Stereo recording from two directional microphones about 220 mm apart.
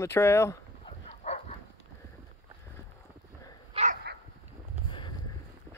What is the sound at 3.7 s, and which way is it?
Dog, 35° right (ahead or behind).